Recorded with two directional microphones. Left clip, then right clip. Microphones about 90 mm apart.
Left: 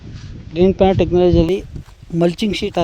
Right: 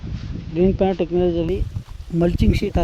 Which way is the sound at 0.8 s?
65° left (ahead or behind).